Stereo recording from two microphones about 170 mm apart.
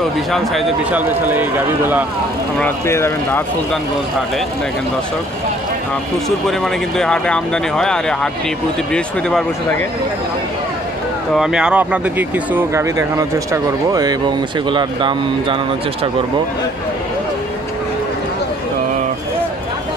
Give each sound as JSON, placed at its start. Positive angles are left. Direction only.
{"t": 0.9, "sound": "speech", "side_deg": -10}
{"t": 2.6, "sound": "speech", "side_deg": 15}
{"t": 6.4, "sound": "speech", "side_deg": 5}
{"t": 11.3, "sound": "speech", "side_deg": -5}